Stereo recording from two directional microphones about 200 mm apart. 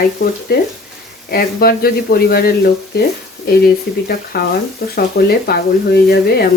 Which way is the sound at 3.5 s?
50° left (ahead or behind).